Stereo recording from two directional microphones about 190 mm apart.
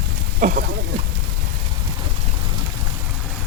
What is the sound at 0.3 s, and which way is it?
Speech, 50° right (ahead or behind).